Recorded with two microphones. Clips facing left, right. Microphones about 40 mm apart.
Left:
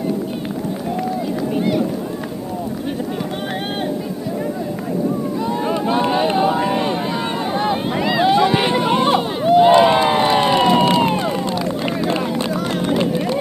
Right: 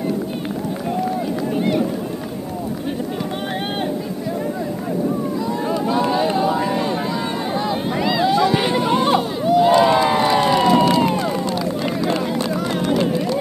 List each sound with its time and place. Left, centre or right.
5.5 s a sound: left
7.5 s vehicle: left
7.9 s boat: centre
8.2 s run: left
9.4 s crowd: left
12.1 s run: left